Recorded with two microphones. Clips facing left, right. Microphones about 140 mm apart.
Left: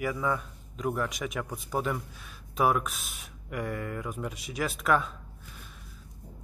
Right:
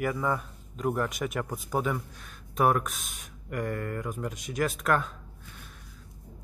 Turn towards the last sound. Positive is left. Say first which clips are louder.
# even
turn(degrees=0)  # may be behind; listen again after turning